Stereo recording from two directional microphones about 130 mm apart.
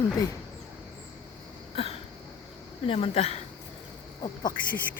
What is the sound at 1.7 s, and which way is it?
Throat clearing, 45° left (ahead or behind).